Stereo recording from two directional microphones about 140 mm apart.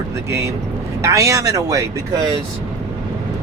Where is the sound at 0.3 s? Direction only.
20° right (ahead or behind).